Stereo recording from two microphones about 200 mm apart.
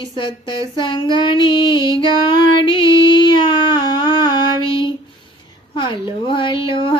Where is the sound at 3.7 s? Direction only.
25° left (ahead or behind).